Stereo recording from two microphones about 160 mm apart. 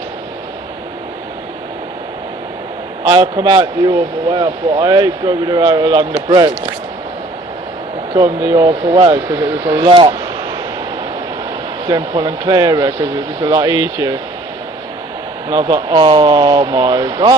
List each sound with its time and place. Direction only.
3.0 s a man's voice: 25° right (ahead or behind)
8.1 s a man's voice: 25° right (ahead or behind)
9.1 s speech: 20° right (ahead or behind)
9.8 s speech: 30° right (ahead or behind)
11.9 s a man's voice: 25° right (ahead or behind)
15.5 s a man's voice: 25° right (ahead or behind)